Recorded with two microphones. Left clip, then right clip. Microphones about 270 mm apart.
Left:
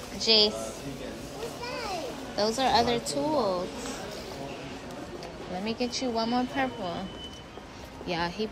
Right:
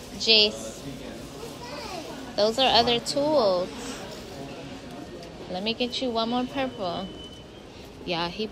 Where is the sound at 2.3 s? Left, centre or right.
Centre.